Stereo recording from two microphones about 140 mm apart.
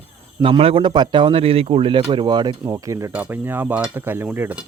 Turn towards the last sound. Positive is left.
turn(degrees=-10)  # may be behind; listen again after turning